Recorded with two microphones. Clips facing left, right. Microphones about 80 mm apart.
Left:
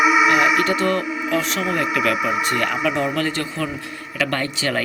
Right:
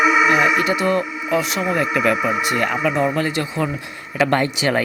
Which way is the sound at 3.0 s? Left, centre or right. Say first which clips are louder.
Right 2 dB; centre.